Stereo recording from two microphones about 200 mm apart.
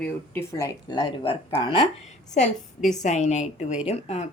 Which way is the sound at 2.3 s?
35° left (ahead or behind).